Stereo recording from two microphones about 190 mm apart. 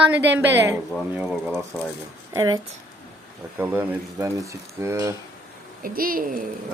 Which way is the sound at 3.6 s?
10° right (ahead or behind).